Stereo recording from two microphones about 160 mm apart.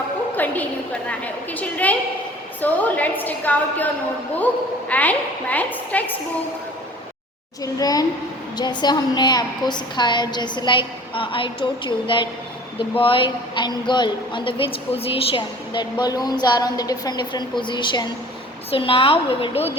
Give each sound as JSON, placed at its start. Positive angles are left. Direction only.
{"t": 0.3, "sound": "a sound", "side_deg": 10}
{"t": 1.2, "sound": "a woman's voice", "side_deg": 10}
{"t": 4.9, "sound": "a woman's voice", "side_deg": 10}
{"t": 7.6, "sound": "a woman's voice", "side_deg": 25}